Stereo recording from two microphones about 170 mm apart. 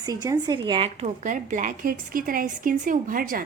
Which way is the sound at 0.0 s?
20° right (ahead or behind).